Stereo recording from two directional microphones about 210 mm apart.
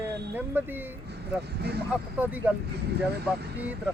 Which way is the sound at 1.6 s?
50° right (ahead or behind).